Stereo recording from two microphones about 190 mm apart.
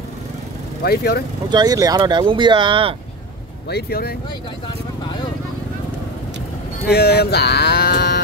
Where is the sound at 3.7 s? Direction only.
55° left (ahead or behind).